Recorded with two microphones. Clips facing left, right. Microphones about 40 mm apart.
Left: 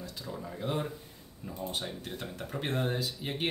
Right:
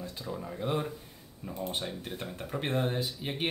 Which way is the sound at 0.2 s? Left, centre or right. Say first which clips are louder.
Right 2 dB; centre.